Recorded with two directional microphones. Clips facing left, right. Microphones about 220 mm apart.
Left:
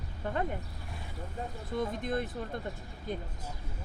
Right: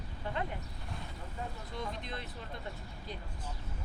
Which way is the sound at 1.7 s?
50° left (ahead or behind).